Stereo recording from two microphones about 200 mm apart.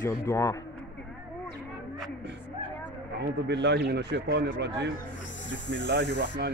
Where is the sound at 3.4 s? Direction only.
60° right (ahead or behind).